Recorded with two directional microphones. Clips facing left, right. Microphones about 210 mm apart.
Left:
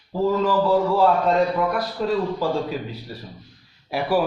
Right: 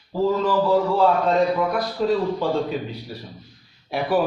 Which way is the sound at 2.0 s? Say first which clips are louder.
Right 2 dB; centre (ahead or behind).